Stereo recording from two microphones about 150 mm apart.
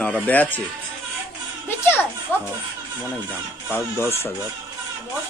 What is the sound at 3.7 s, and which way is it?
Speech, 15° left (ahead or behind).